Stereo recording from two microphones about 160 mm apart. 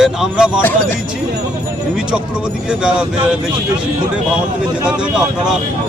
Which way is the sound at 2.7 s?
5° right (ahead or behind).